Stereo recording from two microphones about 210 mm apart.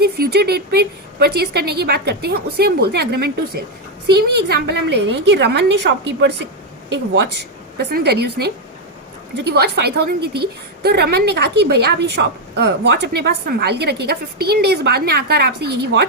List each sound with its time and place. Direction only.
0.0 s a woman's voice: 50° right (ahead or behind)